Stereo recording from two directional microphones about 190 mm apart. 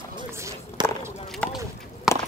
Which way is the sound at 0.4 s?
15° right (ahead or behind).